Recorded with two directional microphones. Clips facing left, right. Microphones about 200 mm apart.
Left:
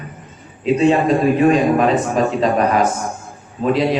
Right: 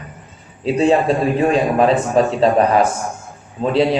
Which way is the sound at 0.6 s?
30° right (ahead or behind).